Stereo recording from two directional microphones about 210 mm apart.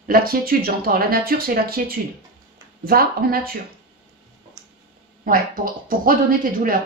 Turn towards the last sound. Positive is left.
turn(degrees=-40)  # may be behind; listen again after turning